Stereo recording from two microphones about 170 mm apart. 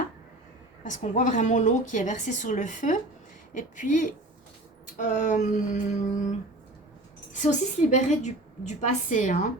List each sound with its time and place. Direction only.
0.9 s a woman's voice: 45° left (ahead or behind)
7.3 s a woman's voice: 45° left (ahead or behind)